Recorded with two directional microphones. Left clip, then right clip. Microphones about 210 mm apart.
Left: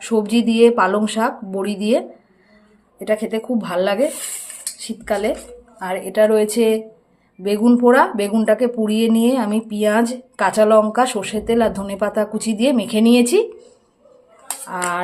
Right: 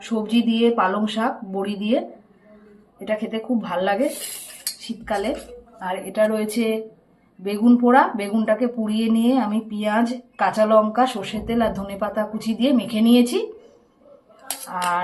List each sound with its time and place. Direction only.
0.3 s speech: 50° left (ahead or behind)
3.0 s speech: 50° left (ahead or behind)
5.0 s speech: 50° left (ahead or behind)